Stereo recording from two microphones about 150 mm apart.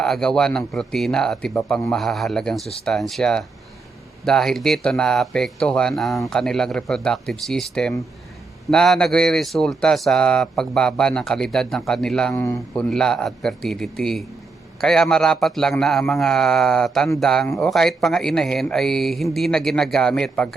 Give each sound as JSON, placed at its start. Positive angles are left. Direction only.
{"t": 0.0, "sound": "speech", "side_deg": 5}
{"t": 12.3, "sound": "speech", "side_deg": 20}
{"t": 12.7, "sound": "speech", "side_deg": 5}